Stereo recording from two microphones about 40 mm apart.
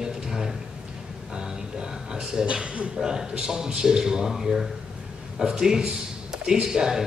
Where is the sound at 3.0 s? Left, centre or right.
Centre.